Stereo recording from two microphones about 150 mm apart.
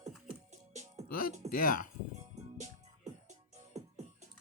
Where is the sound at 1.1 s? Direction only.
70° left (ahead or behind).